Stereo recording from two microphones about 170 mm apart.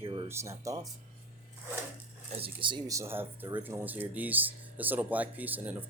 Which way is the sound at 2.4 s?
30° right (ahead or behind).